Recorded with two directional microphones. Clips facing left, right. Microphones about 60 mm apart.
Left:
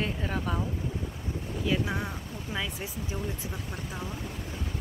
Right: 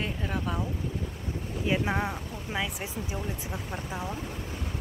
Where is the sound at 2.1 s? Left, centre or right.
Centre.